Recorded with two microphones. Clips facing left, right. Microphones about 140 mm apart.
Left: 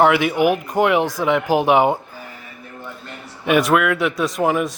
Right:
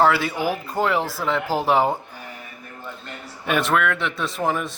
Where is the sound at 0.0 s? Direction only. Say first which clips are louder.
Left 5 dB; 15° left (ahead or behind).